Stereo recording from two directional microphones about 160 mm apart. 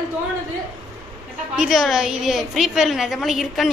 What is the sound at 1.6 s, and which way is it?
A woman's voice, centre (ahead or behind).